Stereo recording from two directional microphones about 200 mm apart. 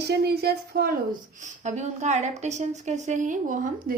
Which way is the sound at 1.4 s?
35° right (ahead or behind).